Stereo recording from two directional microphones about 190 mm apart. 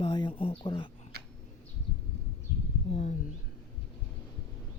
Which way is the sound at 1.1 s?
55° right (ahead or behind).